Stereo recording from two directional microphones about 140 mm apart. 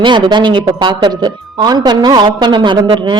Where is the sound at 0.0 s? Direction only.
35° right (ahead or behind).